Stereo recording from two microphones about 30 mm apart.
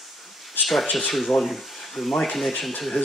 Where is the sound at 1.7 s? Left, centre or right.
Centre.